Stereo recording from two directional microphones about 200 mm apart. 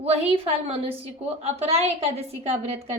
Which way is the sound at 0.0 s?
30° right (ahead or behind).